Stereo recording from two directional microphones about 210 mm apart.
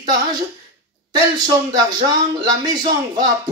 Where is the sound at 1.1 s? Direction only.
20° right (ahead or behind).